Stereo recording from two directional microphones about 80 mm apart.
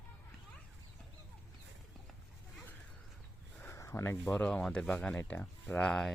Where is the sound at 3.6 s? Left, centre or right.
Left.